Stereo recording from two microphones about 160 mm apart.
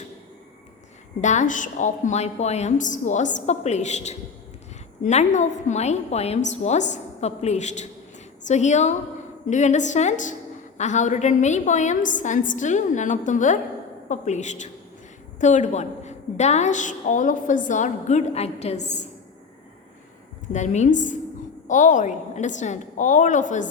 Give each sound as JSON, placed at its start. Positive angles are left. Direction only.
{"t": 1.2, "sound": "a woman's voice", "side_deg": 50}
{"t": 20.5, "sound": "a woman's voice", "side_deg": 50}